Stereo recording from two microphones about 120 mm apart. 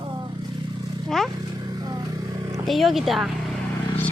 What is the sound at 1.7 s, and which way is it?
Vehicle, 35° right (ahead or behind).